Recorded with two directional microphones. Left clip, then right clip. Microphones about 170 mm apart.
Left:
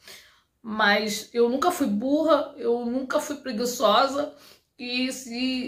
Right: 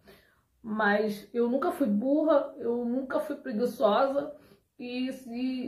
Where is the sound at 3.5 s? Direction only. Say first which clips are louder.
Left 4 dB; 15° left (ahead or behind).